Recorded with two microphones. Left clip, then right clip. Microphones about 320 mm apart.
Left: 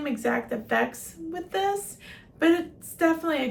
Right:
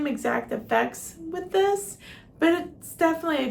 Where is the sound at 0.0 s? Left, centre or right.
Centre.